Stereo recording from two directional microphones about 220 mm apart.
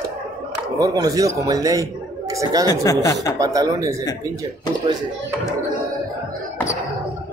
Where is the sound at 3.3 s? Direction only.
15° right (ahead or behind).